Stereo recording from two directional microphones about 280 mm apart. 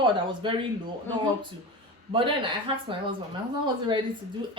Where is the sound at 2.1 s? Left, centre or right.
Centre.